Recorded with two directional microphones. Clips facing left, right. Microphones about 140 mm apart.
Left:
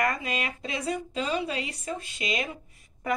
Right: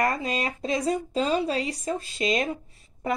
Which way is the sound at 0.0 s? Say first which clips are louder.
Right 3 dB; 35° right (ahead or behind).